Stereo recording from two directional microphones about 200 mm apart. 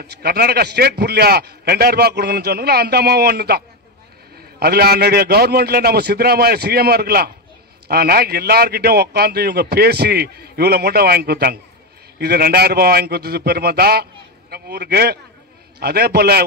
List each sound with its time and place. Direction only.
0.0 s a man's voice: 55° right (ahead or behind)